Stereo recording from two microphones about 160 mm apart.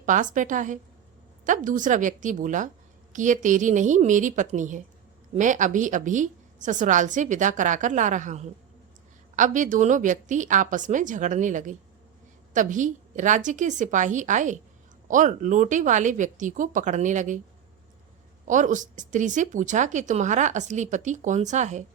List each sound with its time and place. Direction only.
0.0 s speech: 55° right (ahead or behind)
18.4 s speech: 50° right (ahead or behind)